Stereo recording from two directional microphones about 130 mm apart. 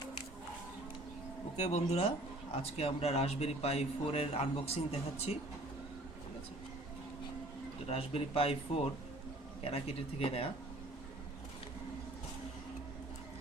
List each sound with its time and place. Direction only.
1.6 s speech: 55° left (ahead or behind)
7.9 s speech: 50° left (ahead or behind)